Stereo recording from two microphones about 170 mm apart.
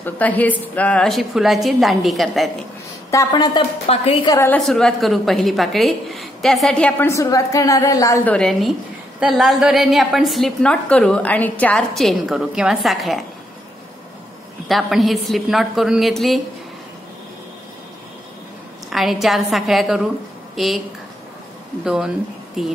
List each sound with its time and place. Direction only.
0.0 s a woman's voice: 10° left (ahead or behind)
3.1 s speech: 20° left (ahead or behind)
3.9 s a woman's voice: 35° left (ahead or behind)
4.3 s a woman's voice: 15° left (ahead or behind)
4.6 s a woman's voice: centre (ahead or behind); by 8.2 s 20° left (ahead or behind)
8.3 s a woman's voice: 5° left (ahead or behind)
14.7 s a woman's voice: centre (ahead or behind)
18.9 s a woman's voice: centre (ahead or behind)
21.8 s a woman's voice: 5° right (ahead or behind)